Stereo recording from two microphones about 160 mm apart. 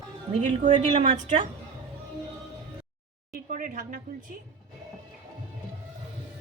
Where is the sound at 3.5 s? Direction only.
55° right (ahead or behind).